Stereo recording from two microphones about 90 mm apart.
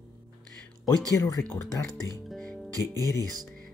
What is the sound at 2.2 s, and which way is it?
Music, 5° left (ahead or behind).